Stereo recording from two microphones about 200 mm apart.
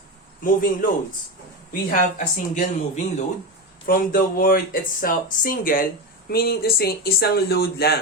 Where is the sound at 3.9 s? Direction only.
45° left (ahead or behind).